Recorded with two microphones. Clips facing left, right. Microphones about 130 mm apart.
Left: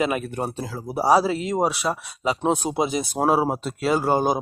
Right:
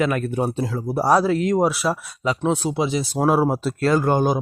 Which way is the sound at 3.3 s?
Centre (ahead or behind).